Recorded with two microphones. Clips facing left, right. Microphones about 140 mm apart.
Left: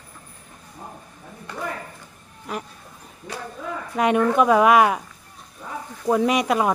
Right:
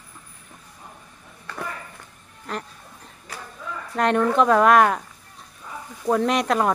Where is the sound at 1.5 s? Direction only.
20° left (ahead or behind).